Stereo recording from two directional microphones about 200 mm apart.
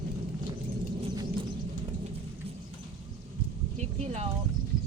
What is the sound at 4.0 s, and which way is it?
Speech, 30° right (ahead or behind).